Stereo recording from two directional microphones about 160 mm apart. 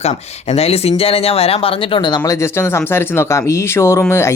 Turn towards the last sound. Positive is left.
turn(degrees=15)  # may be behind; listen again after turning